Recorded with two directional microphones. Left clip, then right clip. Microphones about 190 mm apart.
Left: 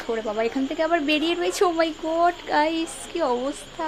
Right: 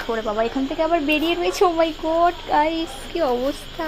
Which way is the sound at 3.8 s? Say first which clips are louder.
Right 1 dB; 5° right (ahead or behind).